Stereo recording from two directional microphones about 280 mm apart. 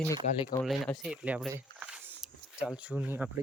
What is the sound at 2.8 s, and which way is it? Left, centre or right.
Speech, centre.